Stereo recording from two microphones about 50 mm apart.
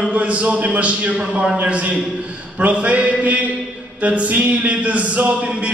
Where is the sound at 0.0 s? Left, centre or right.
Right.